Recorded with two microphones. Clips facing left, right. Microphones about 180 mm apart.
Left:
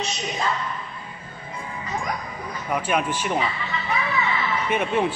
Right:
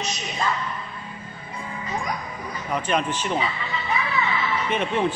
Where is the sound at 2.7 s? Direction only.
10° left (ahead or behind).